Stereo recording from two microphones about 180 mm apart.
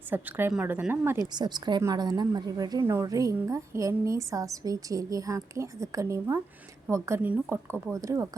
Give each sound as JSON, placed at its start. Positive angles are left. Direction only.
{"t": 0.1, "sound": "speech", "side_deg": -10}
{"t": 1.3, "sound": "a woman's voice", "side_deg": -25}